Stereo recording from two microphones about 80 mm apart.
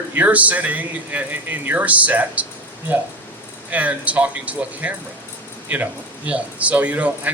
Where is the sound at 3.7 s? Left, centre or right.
Centre.